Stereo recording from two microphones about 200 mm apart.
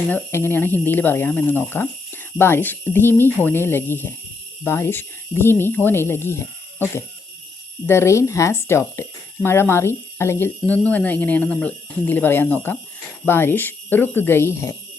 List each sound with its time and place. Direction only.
0.1 s speech: 10° left (ahead or behind)